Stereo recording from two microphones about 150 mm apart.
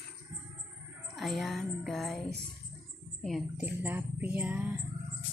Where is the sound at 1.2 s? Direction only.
Centre (ahead or behind).